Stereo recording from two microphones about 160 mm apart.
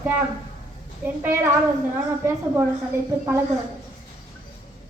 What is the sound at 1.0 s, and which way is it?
A woman's voice, 15° right (ahead or behind).